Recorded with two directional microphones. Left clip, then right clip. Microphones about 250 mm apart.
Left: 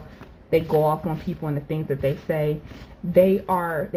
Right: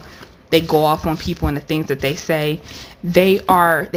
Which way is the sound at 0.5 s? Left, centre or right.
Right.